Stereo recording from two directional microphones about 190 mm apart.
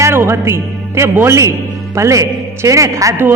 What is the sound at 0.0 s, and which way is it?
A man's voice, 15° right (ahead or behind).